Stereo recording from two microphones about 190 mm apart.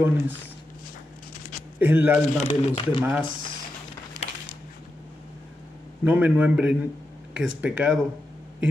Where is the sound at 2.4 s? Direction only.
30° left (ahead or behind).